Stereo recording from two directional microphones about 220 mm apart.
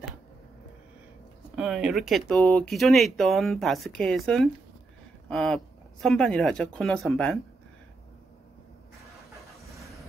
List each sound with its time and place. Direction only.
1.5 s speech: centre (ahead or behind)